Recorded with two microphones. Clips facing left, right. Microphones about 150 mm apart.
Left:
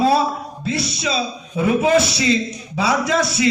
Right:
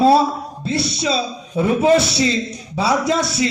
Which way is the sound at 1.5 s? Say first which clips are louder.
Right 1 dB; 30° right (ahead or behind).